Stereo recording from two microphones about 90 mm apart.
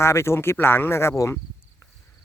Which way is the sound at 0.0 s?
30° left (ahead or behind).